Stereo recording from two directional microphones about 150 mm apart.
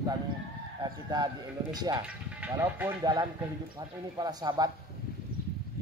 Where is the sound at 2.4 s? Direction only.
15° right (ahead or behind).